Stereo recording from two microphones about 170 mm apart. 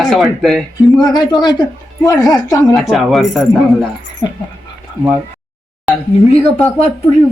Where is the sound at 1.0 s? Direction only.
25° left (ahead or behind).